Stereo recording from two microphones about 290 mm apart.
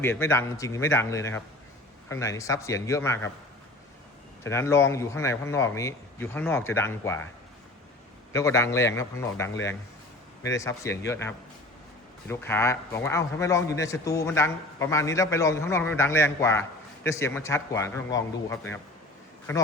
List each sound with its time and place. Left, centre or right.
0.0 s a man's voice: centre
4.4 s a man's voice: centre
8.3 s a man's voice: centre